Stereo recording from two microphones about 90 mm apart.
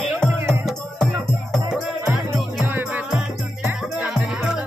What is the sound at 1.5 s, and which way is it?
Music, 10° right (ahead or behind).